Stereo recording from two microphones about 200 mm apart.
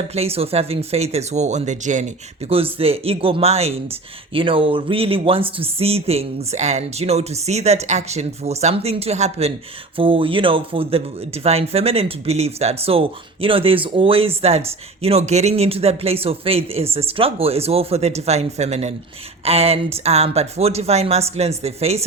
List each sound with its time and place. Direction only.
0.1 s speech: 30° right (ahead or behind)